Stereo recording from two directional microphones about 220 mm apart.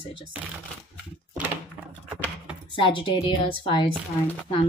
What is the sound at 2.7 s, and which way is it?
A woman's voice, 20° left (ahead or behind).